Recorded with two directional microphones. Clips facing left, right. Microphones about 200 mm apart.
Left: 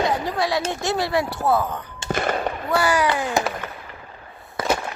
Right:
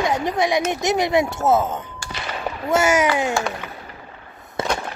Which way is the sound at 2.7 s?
20° right (ahead or behind).